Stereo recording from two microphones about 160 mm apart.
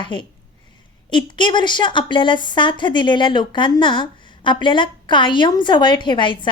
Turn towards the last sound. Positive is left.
turn(degrees=30)  # may be behind; listen again after turning